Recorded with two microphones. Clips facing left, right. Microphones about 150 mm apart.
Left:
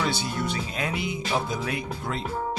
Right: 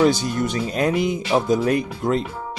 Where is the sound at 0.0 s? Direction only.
45° right (ahead or behind).